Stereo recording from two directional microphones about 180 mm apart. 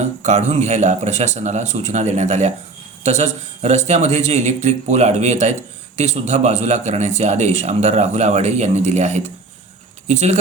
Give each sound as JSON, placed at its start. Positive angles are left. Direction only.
{"t": 0.0, "sound": "a man's voice", "side_deg": -40}